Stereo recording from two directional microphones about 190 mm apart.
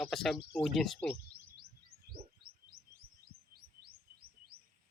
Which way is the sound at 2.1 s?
55° right (ahead or behind).